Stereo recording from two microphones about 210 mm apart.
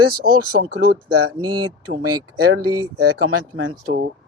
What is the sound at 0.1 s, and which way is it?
Speech, 45° right (ahead or behind).